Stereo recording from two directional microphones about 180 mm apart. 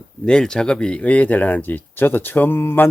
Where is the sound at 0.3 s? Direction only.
5° left (ahead or behind).